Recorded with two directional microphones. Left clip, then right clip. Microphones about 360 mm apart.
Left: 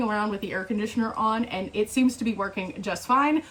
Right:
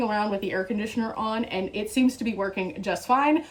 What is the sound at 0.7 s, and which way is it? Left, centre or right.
Speech, centre.